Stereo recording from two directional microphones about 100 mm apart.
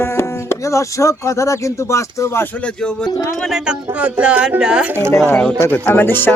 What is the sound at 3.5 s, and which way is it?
Speech, 10° right (ahead or behind).